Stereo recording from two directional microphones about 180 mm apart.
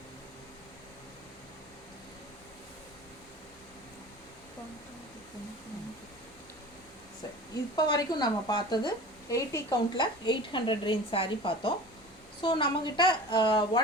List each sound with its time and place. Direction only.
7.8 s a woman's voice: 20° left (ahead or behind)